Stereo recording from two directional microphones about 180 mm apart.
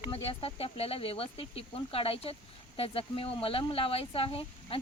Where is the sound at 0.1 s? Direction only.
30° left (ahead or behind).